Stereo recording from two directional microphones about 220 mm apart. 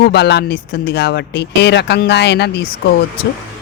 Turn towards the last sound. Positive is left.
turn(degrees=45)  # may be behind; listen again after turning